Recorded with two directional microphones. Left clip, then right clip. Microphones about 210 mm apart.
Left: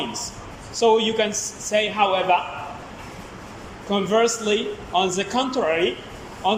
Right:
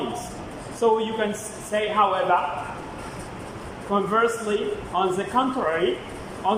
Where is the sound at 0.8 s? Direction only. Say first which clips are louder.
Left 3 dB; 15° left (ahead or behind).